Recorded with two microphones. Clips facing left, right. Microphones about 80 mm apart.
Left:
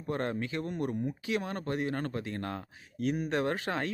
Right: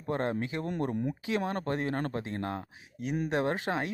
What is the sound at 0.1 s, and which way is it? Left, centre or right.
Speech, right.